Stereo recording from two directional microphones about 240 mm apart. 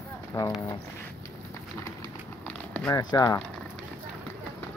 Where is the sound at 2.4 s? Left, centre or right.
Centre.